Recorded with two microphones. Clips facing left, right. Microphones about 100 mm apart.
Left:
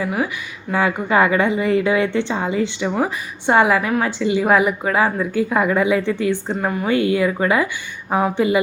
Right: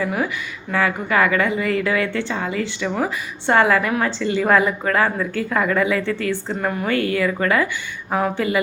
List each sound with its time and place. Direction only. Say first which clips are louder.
0.0 s a woman's voice: left 1 dB; 5° left (ahead or behind)
0.7 s a woman's voice: left 2 dB; 20° left (ahead or behind)